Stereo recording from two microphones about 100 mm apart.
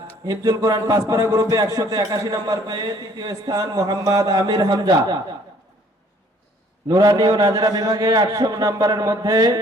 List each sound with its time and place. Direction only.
0.3 s a man's voice: 35° right (ahead or behind)
6.8 s a man's voice: 35° right (ahead or behind)